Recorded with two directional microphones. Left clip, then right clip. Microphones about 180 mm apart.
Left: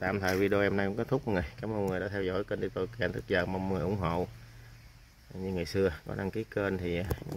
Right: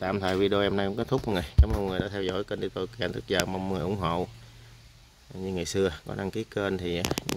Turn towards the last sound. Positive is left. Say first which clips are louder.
# right 3 dB
turn(degrees=-15)  # may be behind; listen again after turning